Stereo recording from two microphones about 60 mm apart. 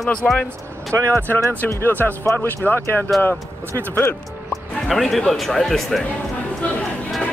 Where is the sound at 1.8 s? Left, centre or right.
Left.